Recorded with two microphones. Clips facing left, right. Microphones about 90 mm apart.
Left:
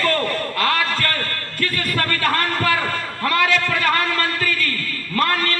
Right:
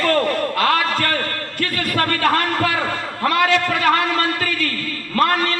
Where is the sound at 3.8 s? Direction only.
15° right (ahead or behind).